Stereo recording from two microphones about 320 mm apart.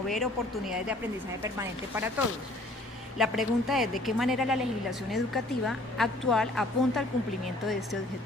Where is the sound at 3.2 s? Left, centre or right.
Centre.